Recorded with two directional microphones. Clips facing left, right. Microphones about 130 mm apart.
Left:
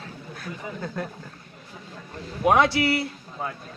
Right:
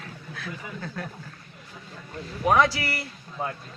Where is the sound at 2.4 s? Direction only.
20° left (ahead or behind).